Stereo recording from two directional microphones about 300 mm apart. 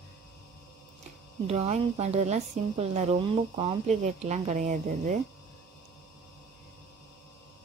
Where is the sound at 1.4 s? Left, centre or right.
Right.